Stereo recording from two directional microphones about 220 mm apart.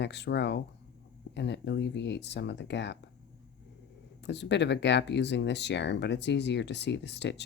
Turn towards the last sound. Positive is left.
turn(degrees=50)  # may be behind; listen again after turning